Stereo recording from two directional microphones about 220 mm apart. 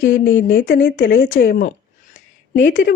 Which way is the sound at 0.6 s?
40° left (ahead or behind).